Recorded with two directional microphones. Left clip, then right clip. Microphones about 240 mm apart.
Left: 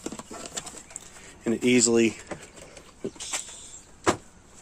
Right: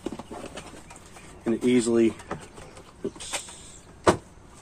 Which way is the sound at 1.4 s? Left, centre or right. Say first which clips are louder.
Left 1 dB; left.